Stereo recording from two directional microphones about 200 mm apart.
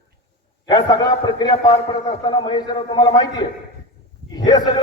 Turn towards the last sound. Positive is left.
turn(degrees=20)  # may be behind; listen again after turning